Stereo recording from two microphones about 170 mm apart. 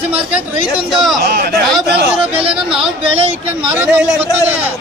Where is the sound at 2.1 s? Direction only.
30° right (ahead or behind).